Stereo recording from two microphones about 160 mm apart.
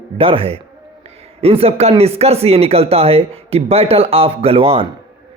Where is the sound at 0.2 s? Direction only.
35° right (ahead or behind).